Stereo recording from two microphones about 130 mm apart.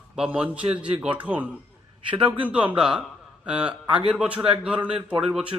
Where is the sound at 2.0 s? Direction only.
40° right (ahead or behind).